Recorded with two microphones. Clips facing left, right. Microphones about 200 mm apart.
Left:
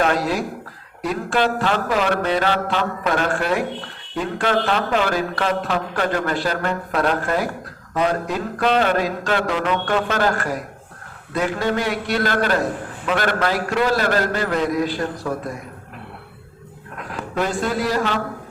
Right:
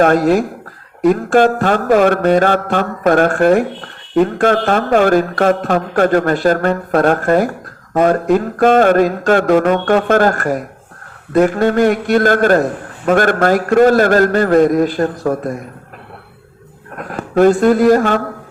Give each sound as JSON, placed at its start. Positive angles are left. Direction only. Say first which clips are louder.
{"t": 0.0, "sound": "a man's voice", "louder": "right 9 dB", "side_deg": -50}
{"t": 17.0, "sound": "speech", "louder": "right 12 dB", "side_deg": -50}